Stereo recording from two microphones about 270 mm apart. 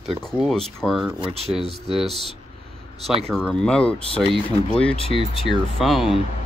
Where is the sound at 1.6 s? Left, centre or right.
Right.